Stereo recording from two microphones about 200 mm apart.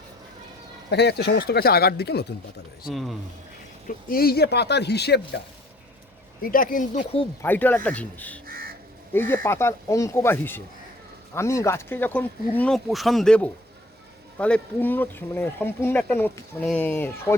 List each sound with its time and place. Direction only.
0.9 s speech: 55° left (ahead or behind)
2.9 s speech: centre (ahead or behind)
3.8 s speech: 50° left (ahead or behind)
6.4 s speech: 45° left (ahead or behind)
7.4 s speech: 10° left (ahead or behind)
8.4 s crow: 50° right (ahead or behind)
9.1 s speech: 10° left (ahead or behind)